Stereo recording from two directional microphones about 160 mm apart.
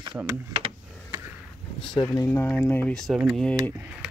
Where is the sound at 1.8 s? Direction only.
30° left (ahead or behind).